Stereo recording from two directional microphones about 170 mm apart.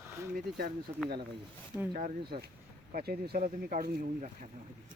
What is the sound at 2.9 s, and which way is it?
Speech, 60° right (ahead or behind).